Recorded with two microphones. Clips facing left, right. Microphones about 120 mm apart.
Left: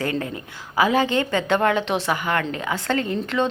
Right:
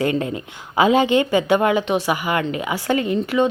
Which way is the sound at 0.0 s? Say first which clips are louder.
Right 5 dB; 20° right (ahead or behind).